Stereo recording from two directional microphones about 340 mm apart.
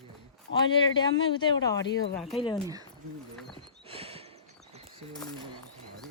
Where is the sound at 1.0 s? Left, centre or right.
Centre.